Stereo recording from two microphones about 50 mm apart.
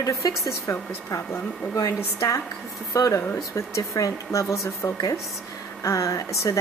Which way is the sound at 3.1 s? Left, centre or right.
Left.